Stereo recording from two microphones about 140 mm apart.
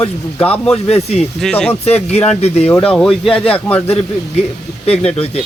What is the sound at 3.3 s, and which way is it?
Speech, 40° left (ahead or behind).